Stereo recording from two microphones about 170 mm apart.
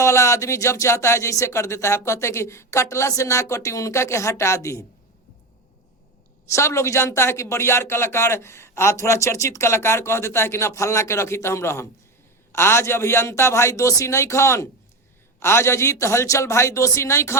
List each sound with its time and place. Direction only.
0.0 s speech: 15° left (ahead or behind)
6.5 s speech: 15° left (ahead or behind)